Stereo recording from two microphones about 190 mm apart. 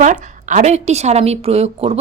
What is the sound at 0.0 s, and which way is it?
A woman's voice, 40° right (ahead or behind).